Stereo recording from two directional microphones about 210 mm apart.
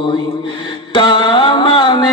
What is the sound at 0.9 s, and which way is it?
Music, 20° left (ahead or behind).